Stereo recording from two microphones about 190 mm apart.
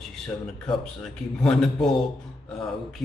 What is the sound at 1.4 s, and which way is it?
Speech, 5° left (ahead or behind).